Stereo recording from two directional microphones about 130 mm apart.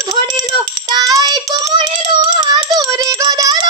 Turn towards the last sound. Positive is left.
turn(degrees=-30)  # may be behind; listen again after turning